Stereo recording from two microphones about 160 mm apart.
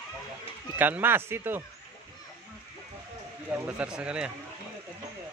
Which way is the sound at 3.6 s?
5° right (ahead or behind).